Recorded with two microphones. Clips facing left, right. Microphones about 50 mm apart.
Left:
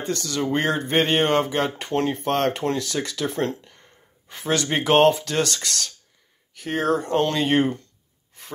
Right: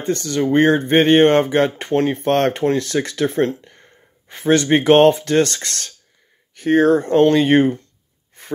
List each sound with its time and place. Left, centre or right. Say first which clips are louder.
0.0 s speech: right 6 dB; right